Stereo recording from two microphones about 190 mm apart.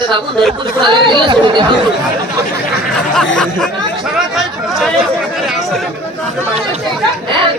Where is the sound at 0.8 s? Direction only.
25° right (ahead or behind).